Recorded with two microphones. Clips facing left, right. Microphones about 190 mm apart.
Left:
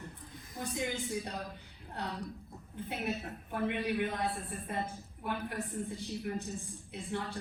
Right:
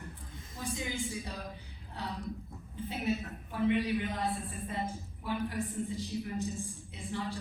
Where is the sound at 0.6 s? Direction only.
60° left (ahead or behind).